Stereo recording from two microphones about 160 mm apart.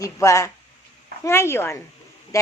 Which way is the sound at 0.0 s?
20° left (ahead or behind).